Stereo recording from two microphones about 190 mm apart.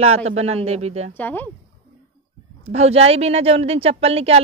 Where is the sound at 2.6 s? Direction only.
35° right (ahead or behind).